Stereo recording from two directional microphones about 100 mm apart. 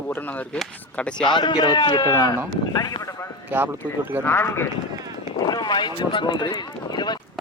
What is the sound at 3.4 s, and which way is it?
Speech, 20° right (ahead or behind).